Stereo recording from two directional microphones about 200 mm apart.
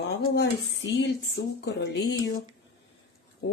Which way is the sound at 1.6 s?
55° left (ahead or behind).